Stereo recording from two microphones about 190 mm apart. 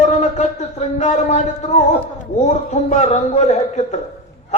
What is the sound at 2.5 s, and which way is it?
A man's voice, 35° left (ahead or behind).